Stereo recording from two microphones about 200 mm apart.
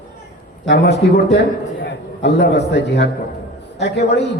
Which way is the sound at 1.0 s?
55° left (ahead or behind).